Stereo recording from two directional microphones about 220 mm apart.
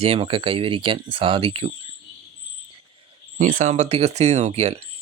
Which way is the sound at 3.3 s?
35° right (ahead or behind).